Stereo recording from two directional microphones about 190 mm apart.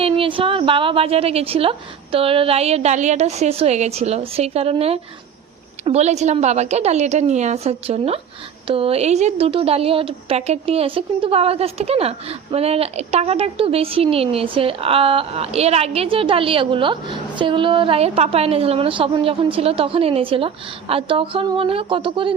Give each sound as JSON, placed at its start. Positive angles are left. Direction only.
{"t": 0.0, "sound": "a woman's voice", "side_deg": -25}